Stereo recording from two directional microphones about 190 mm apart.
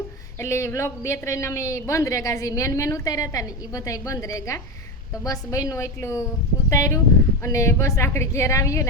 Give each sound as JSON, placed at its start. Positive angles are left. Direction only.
{"t": 0.3, "sound": "a man's voice", "side_deg": 15}